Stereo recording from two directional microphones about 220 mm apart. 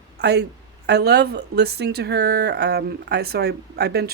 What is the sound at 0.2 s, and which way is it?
A woman's voice, 45° right (ahead or behind).